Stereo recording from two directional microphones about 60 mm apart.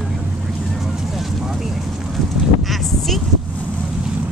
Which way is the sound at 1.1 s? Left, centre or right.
Centre.